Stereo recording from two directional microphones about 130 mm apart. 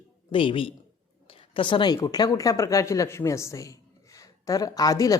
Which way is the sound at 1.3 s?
45° left (ahead or behind).